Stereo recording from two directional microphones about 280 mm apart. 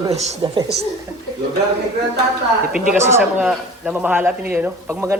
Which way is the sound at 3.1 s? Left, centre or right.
Centre.